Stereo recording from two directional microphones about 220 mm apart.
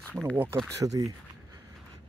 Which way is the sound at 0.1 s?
5° left (ahead or behind).